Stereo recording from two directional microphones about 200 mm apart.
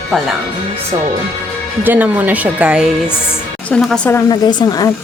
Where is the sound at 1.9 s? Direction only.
10° right (ahead or behind).